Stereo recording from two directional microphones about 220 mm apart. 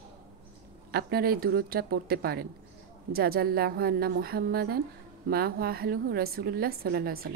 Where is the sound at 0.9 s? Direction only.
45° right (ahead or behind).